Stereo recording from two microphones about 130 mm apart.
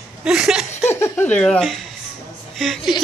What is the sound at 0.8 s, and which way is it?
Speech, 15° left (ahead or behind).